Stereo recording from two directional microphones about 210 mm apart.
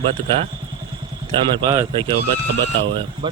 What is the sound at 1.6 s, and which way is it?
Speech, 20° right (ahead or behind).